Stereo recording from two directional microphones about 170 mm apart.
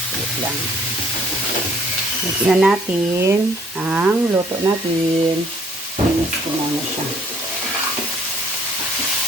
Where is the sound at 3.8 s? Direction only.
10° right (ahead or behind).